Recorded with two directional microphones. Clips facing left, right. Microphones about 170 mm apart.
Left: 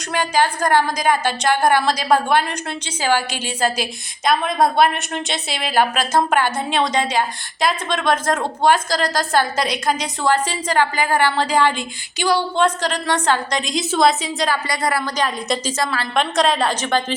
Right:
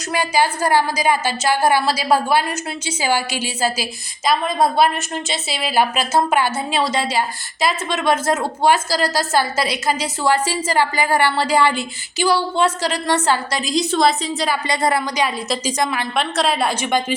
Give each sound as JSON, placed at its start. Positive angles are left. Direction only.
{"t": 0.1, "sound": "a woman's voice", "side_deg": -10}
{"t": 14.7, "sound": "speech", "side_deg": -25}
{"t": 15.0, "sound": "a woman's voice", "side_deg": -10}
{"t": 16.1, "sound": "a woman's voice", "side_deg": 0}